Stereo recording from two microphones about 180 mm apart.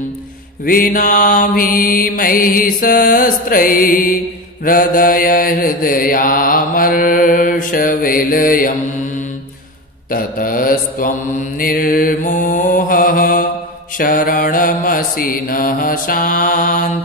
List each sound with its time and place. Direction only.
0.7 s mantra: 50° left (ahead or behind)
10.1 s mantra: 50° left (ahead or behind)